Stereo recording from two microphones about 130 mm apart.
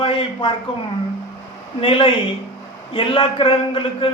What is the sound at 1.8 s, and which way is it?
A man's voice, 45° left (ahead or behind).